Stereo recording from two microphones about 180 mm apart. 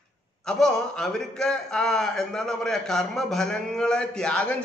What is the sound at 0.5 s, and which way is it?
A man's voice, 5° left (ahead or behind).